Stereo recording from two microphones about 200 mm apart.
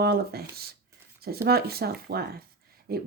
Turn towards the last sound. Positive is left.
turn(degrees=-50)  # may be behind; listen again after turning